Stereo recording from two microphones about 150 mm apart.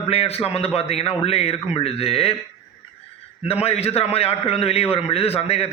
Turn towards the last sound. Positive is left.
turn(degrees=40)  # may be behind; listen again after turning